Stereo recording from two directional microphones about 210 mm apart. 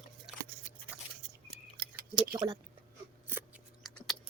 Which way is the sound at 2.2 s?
15° right (ahead or behind).